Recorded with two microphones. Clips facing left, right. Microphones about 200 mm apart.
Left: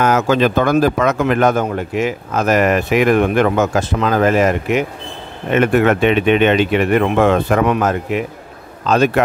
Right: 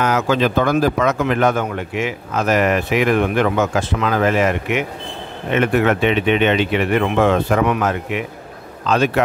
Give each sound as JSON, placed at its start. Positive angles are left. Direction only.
{"t": 0.0, "sound": "speech", "side_deg": 45}
{"t": 5.5, "sound": "speech", "side_deg": 50}
{"t": 7.7, "sound": "speech", "side_deg": 40}